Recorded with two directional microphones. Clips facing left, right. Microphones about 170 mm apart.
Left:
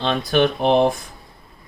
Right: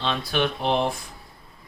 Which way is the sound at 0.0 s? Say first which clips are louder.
Left 7 dB; 50° left (ahead or behind).